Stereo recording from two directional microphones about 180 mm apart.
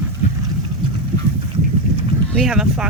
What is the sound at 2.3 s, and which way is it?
Speech, centre (ahead or behind).